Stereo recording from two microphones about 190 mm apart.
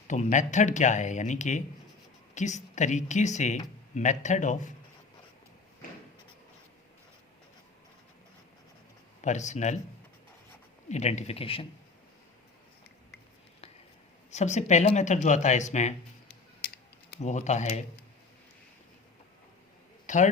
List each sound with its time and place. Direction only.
0.1 s speech: 40° left (ahead or behind)
9.2 s speech: 40° left (ahead or behind)
10.8 s speech: 35° left (ahead or behind)
14.3 s speech: 35° left (ahead or behind)
17.2 s speech: 40° left (ahead or behind)
20.1 s a man's voice: 40° left (ahead or behind)